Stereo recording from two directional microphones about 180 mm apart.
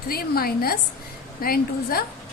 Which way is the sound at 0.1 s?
55° left (ahead or behind).